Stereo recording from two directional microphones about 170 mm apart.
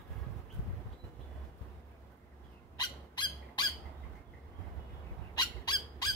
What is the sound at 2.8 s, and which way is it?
Owl, 25° left (ahead or behind).